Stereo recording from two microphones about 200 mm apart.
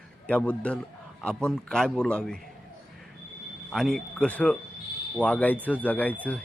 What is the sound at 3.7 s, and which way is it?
A man's voice, centre (ahead or behind).